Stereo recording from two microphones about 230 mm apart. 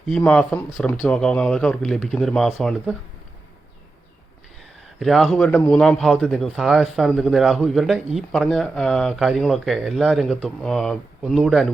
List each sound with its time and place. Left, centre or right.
0.1 s speech: centre
4.9 s speech: centre